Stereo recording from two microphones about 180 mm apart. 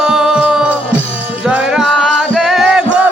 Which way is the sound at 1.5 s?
5° right (ahead or behind).